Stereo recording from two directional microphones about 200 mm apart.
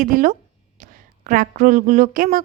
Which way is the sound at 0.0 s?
40° right (ahead or behind).